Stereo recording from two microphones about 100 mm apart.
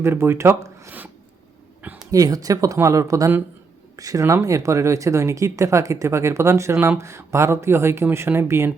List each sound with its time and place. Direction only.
0.0 s speech: 25° right (ahead or behind)
0.9 s a sound: 15° right (ahead or behind)
2.0 s speech: 35° right (ahead or behind)